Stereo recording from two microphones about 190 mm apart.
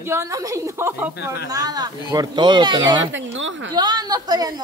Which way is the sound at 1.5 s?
20° right (ahead or behind).